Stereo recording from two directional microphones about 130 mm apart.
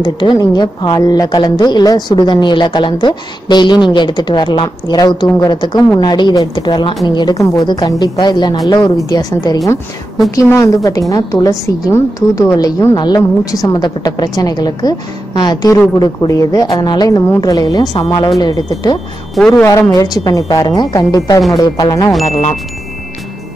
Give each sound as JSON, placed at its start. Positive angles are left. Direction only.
{"t": 0.0, "sound": "a woman's voice", "side_deg": 35}
{"t": 19.3, "sound": "speech", "side_deg": 0}
{"t": 19.6, "sound": "a woman's voice", "side_deg": 25}
{"t": 22.2, "sound": "chime", "side_deg": 55}